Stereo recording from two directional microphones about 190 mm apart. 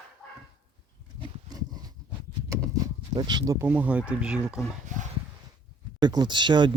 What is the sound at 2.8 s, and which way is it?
Speech, 20° right (ahead or behind).